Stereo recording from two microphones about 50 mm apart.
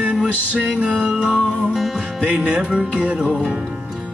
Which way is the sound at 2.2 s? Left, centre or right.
Right.